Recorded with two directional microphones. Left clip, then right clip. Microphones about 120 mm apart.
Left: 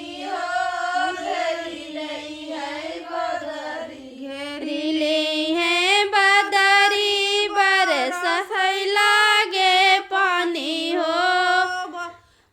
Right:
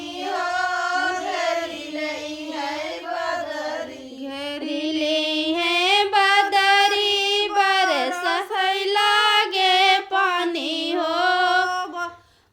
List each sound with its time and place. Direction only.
4.7 s female singing: 35° left (ahead or behind)
8.2 s child singing: 35° left (ahead or behind)
11.6 s mantra: 10° right (ahead or behind)